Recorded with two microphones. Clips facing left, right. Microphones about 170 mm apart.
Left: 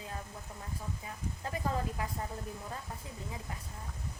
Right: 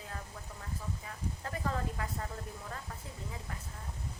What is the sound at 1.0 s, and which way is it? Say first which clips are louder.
Speech: left 1 dB; 20° left (ahead or behind).